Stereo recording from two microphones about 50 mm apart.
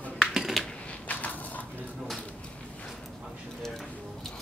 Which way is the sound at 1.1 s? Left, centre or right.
Left.